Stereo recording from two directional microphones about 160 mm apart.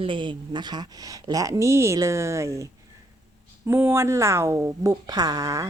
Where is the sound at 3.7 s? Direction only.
15° right (ahead or behind).